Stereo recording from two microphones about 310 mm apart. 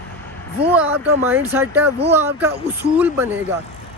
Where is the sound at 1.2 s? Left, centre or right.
Centre.